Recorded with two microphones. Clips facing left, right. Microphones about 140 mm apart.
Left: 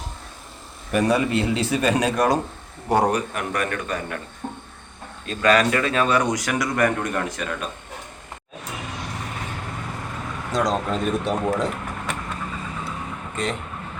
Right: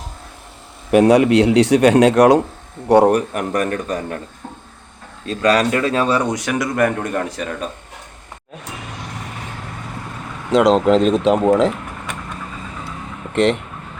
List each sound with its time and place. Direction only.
0.9 s a man's voice: 75° right (ahead or behind)
2.9 s a man's voice: 60° right (ahead or behind); by 4.2 s 40° right (ahead or behind)
5.2 s speech: 35° right (ahead or behind)
10.5 s speech: 75° right (ahead or behind)
13.3 s speech: 75° right (ahead or behind)